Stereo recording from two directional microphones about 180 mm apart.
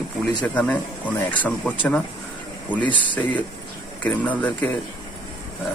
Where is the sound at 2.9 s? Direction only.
25° left (ahead or behind).